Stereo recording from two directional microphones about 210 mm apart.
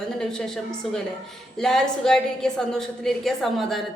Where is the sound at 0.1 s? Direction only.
5° left (ahead or behind).